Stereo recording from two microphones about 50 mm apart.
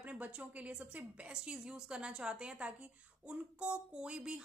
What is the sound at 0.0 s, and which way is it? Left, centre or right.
A woman's voice, right.